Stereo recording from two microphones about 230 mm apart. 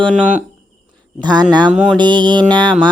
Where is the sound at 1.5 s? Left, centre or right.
Centre.